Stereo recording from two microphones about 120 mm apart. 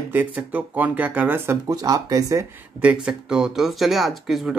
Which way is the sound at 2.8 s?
10° right (ahead or behind).